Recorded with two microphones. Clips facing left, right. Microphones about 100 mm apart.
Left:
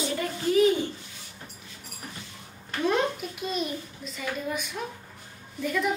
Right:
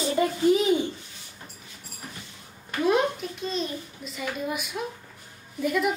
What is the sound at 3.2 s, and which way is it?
Speech, 10° left (ahead or behind).